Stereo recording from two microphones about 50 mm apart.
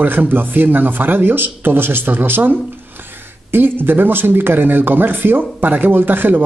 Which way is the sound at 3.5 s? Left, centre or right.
Right.